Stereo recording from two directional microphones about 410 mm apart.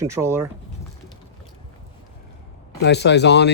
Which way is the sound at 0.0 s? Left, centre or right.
Centre.